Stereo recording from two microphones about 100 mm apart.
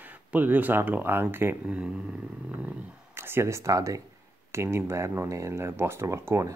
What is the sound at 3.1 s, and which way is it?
Speech, 25° right (ahead or behind).